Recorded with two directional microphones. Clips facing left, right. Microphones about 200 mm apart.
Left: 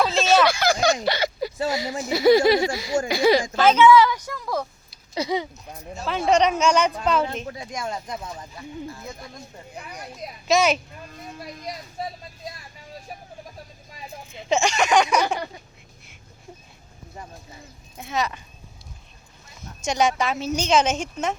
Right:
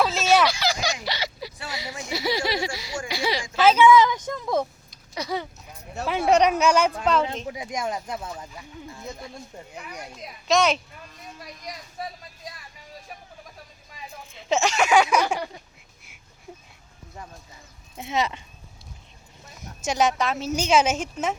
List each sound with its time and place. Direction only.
0.4 s a sound: 50° left (ahead or behind)
1.0 s speech: 50° left (ahead or behind)
3.6 s speech: 10° right (ahead or behind)
5.1 s speech: 25° left (ahead or behind)
6.1 s speech: 10° right (ahead or behind)
7.4 s speech: 15° right (ahead or behind)
10.5 s speech: 5° left (ahead or behind)
12.0 s speech: 30° left (ahead or behind)
14.3 s speech: centre (ahead or behind)
17.9 s speech: 25° right (ahead or behind)
19.8 s speech: 5° right (ahead or behind)